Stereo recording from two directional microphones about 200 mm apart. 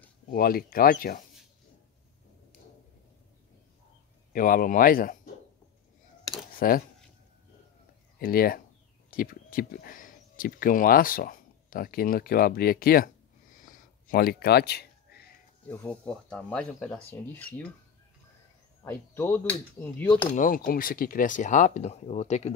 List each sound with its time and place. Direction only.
0.3 s speech: 45° left (ahead or behind)
4.3 s speech: 45° left (ahead or behind)
6.5 s speech: 45° left (ahead or behind)
8.2 s speech: 45° left (ahead or behind)
13.6 s a sound: 40° left (ahead or behind)
15.7 s speech: 10° left (ahead or behind)
18.9 s speech: 10° left (ahead or behind)
20.3 s speech: 45° left (ahead or behind)